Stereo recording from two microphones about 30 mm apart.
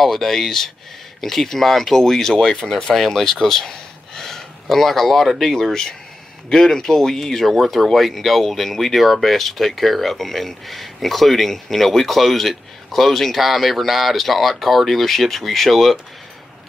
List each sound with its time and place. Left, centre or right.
0.0 s speech: centre
5.6 s speech: centre